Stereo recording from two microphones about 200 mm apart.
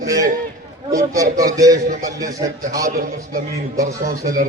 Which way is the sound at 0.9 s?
15° right (ahead or behind).